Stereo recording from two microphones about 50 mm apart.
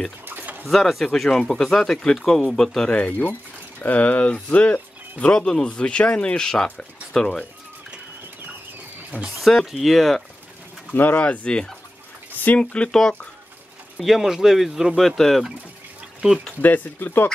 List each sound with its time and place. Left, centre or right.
0.7 s speech: centre
3.1 s speech: left
5.2 s speech: centre
6.3 s speech: centre
9.1 s speech: right
9.7 s speech: centre
11.0 s speech: left
13.9 s speech: centre
16.6 s speech: left